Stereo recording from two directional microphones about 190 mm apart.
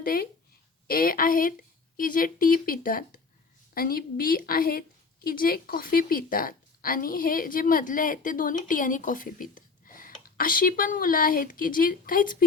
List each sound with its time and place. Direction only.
0.0 s a woman's voice: 50° left (ahead or behind)